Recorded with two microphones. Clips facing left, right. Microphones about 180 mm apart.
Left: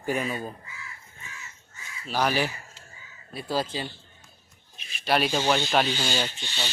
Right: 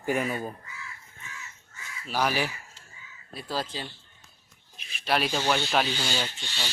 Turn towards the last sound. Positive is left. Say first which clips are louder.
# left 3 dB
turn(degrees=20)  # may be behind; listen again after turning